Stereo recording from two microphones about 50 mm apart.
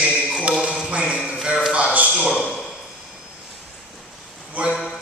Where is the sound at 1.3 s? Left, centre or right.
Centre.